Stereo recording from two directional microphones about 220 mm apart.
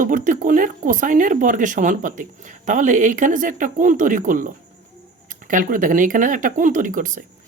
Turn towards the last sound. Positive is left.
turn(degrees=-35)  # may be behind; listen again after turning